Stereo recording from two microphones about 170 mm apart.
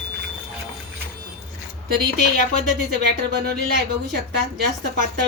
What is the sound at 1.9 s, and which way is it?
Speech, 75° right (ahead or behind).